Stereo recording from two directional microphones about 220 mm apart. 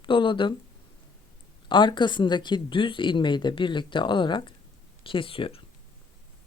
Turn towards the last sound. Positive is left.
turn(degrees=25)  # may be behind; listen again after turning